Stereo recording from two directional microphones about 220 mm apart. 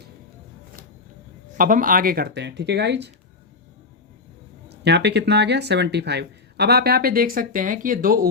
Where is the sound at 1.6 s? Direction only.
40° right (ahead or behind).